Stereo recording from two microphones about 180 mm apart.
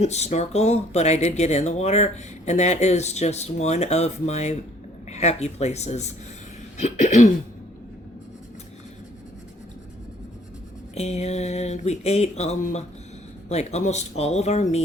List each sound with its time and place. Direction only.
0.0 s speech: 40° left (ahead or behind)
6.7 s cough: 40° left (ahead or behind)
10.9 s speech: 35° left (ahead or behind)